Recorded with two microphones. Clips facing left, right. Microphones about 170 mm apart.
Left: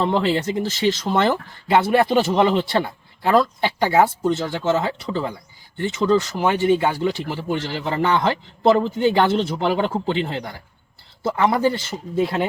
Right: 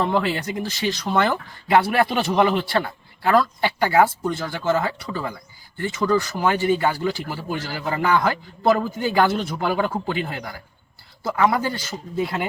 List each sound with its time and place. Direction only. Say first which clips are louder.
0.0 s speech: left 2 dB; 30° left (ahead or behind)